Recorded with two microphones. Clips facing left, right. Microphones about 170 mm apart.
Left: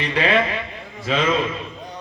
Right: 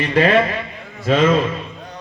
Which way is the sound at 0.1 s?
45° right (ahead or behind).